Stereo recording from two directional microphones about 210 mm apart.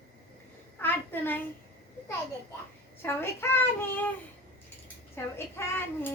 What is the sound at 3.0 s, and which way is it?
Child singing, 10° left (ahead or behind).